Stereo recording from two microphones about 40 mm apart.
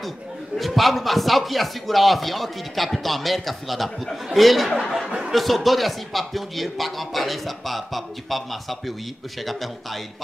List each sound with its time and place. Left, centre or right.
0.6 s speech: centre